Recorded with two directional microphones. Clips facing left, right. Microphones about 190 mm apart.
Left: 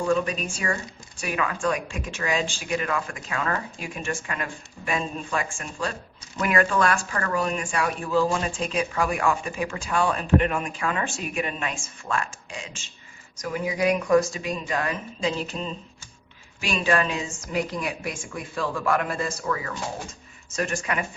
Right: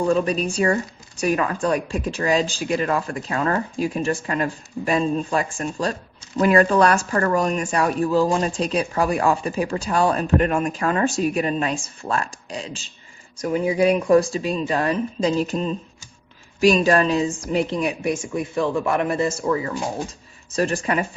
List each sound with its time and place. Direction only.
0.0 s speech: 35° right (ahead or behind)
16.6 s a woman's voice: 40° right (ahead or behind)